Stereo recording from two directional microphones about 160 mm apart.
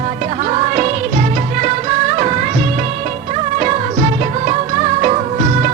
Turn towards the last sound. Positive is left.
turn(degrees=-45)  # may be behind; listen again after turning